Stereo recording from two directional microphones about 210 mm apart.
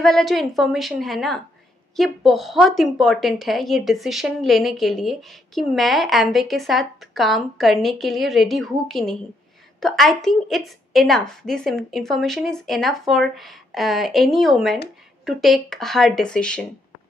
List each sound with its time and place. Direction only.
0.0 s a woman's voice: centre (ahead or behind)